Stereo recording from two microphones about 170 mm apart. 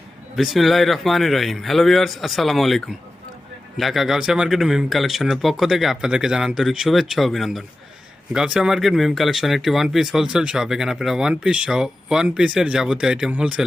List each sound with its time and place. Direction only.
0.3 s speech: centre (ahead or behind)